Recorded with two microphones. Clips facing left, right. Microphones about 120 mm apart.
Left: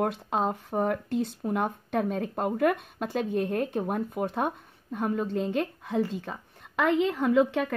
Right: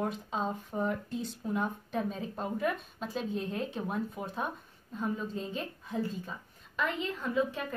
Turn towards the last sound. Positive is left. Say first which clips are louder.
# left 8 dB
turn(degrees=80)